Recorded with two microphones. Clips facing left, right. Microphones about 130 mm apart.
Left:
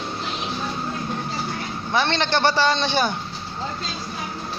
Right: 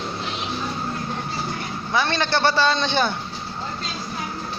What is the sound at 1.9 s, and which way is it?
A man's voice, 20° left (ahead or behind).